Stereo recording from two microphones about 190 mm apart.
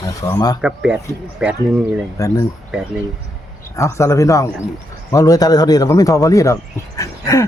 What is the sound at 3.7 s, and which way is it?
A man's voice, 15° left (ahead or behind).